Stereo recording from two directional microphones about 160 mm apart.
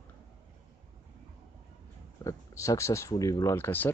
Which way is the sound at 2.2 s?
20° left (ahead or behind).